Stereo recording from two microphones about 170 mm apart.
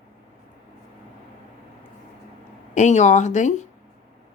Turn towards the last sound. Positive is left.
turn(degrees=45)  # may be behind; listen again after turning